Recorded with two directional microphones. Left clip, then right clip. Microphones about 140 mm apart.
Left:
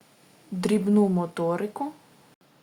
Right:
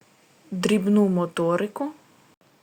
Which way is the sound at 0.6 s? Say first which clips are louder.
Right 2 dB; 10° right (ahead or behind).